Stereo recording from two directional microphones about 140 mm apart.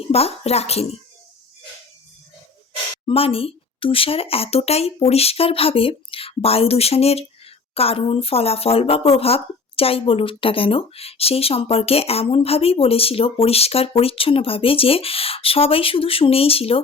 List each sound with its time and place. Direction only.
0.1 s speech: 45° left (ahead or behind)
3.1 s speech: 40° left (ahead or behind)